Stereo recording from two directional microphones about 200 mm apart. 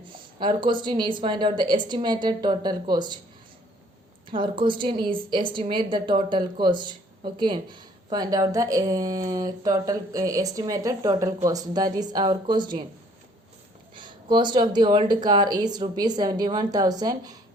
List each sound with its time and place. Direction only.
0.1 s a woman's voice: 25° right (ahead or behind)
4.3 s a woman's voice: 25° right (ahead or behind)
13.9 s a woman's voice: 25° right (ahead or behind)